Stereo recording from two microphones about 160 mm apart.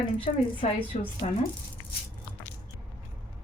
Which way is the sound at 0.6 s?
45° left (ahead or behind).